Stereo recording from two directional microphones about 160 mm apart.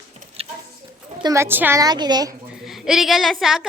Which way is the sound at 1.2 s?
20° right (ahead or behind).